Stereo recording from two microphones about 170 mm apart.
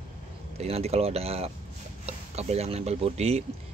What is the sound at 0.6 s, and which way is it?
Speech, 35° right (ahead or behind).